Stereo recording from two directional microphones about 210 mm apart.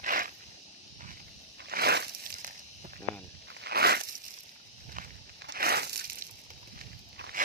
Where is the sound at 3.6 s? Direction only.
50° right (ahead or behind).